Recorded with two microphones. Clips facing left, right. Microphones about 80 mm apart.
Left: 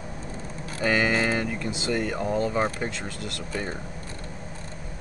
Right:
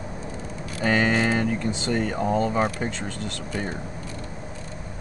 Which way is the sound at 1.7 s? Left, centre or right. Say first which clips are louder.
Right 2 dB; centre.